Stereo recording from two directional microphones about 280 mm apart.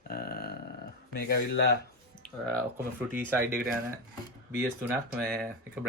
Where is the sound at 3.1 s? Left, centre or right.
Centre.